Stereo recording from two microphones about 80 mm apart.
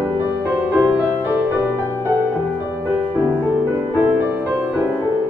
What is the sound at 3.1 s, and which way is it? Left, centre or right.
Music, right.